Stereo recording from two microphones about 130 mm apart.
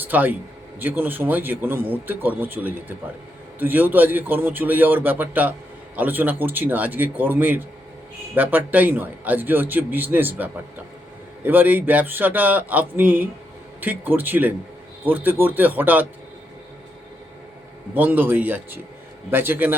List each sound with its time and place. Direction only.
0.0 s a man's voice: 15° right (ahead or behind)
17.9 s a man's voice: 15° right (ahead or behind)